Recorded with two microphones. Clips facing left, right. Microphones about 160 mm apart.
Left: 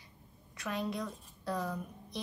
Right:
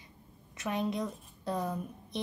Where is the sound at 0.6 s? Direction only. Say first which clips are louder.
Right 4 dB; 20° right (ahead or behind).